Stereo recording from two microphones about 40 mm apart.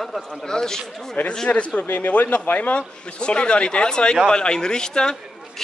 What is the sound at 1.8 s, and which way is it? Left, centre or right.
Speech, left.